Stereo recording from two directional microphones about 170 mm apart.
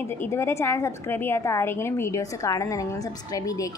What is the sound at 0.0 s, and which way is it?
A woman's voice, 15° left (ahead or behind).